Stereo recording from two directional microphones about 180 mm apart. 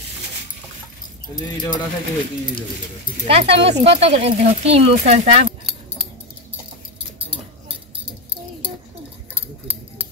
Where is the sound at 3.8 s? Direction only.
35° right (ahead or behind).